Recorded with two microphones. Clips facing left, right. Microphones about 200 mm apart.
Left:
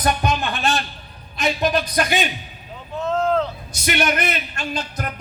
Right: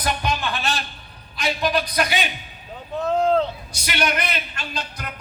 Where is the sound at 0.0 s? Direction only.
45° left (ahead or behind).